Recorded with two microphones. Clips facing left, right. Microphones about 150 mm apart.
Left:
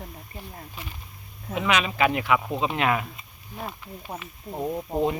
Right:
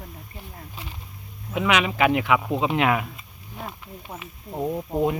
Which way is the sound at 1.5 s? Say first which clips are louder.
Right 2 dB; 15° right (ahead or behind).